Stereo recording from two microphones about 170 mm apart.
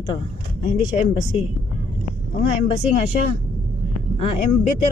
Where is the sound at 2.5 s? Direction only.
40° left (ahead or behind).